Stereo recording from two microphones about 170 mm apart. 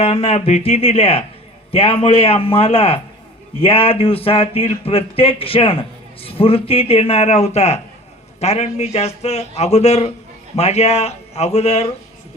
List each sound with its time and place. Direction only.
0.0 s speech: 35° left (ahead or behind)